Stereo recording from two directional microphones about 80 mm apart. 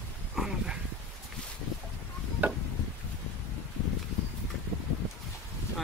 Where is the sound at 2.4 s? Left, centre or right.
Centre.